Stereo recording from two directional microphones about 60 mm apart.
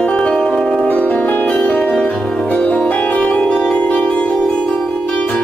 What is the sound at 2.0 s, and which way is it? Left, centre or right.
Music, centre.